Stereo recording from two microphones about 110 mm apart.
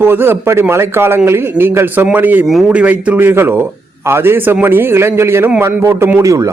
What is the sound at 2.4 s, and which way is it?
A man's voice, centre (ahead or behind).